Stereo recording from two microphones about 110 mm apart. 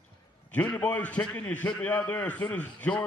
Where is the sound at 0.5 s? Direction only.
15° left (ahead or behind).